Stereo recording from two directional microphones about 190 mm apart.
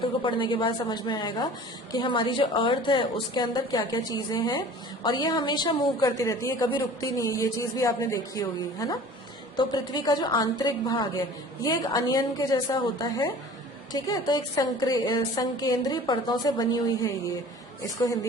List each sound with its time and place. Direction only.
0.2 s a woman's voice: 25° left (ahead or behind)